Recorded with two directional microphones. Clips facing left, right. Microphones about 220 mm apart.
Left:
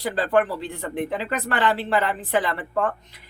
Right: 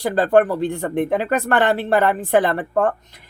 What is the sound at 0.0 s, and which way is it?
Speech, 45° right (ahead or behind).